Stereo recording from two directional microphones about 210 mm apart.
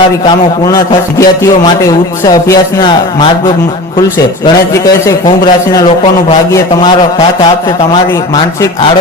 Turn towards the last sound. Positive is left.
turn(degrees=15)  # may be behind; listen again after turning